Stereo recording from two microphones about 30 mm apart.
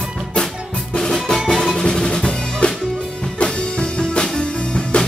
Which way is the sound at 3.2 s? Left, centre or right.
Left.